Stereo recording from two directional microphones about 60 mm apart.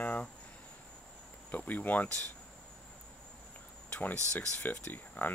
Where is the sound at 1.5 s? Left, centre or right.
Left.